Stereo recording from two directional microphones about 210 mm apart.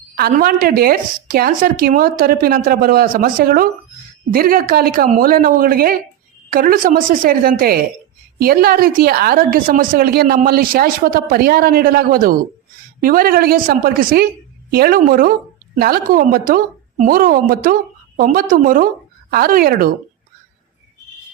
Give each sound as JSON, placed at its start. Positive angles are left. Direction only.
{"t": 0.2, "sound": "a woman's voice", "side_deg": -45}